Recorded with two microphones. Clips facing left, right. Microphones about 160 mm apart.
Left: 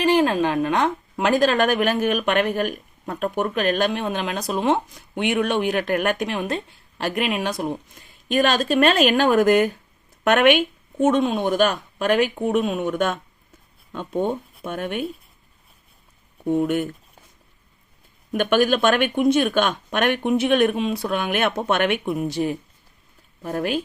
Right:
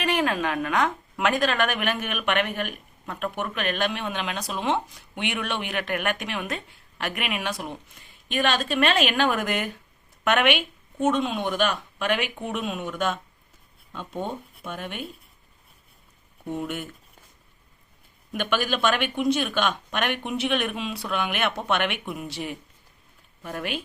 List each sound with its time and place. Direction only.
0.0 s a woman's voice: 30° left (ahead or behind)
8.0 s a sound: 40° left (ahead or behind)
8.3 s a woman's voice: 40° left (ahead or behind)
16.5 s speech: 50° left (ahead or behind)
18.3 s a woman's voice: 50° left (ahead or behind)